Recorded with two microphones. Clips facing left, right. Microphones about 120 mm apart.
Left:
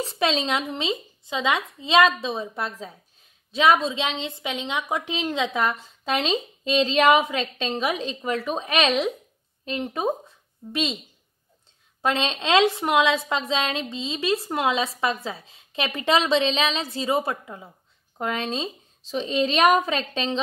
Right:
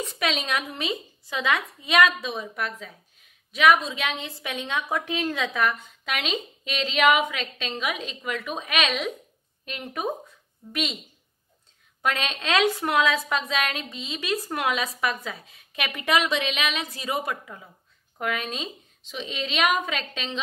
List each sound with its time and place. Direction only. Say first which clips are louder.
0.0 s a woman's voice: left 4 dB; 30° left (ahead or behind)
12.0 s a woman's voice: left 3 dB; 25° left (ahead or behind)